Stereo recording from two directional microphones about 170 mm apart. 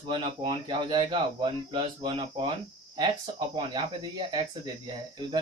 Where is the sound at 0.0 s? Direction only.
30° right (ahead or behind).